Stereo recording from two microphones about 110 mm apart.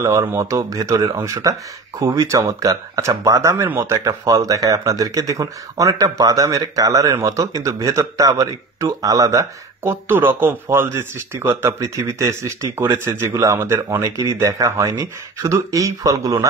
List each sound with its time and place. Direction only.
0.0 s speech: 30° right (ahead or behind)